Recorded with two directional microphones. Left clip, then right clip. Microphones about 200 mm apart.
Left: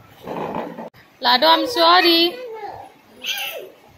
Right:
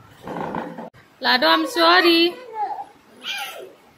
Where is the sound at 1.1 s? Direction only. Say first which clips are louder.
Left 2 dB; 15° right (ahead or behind).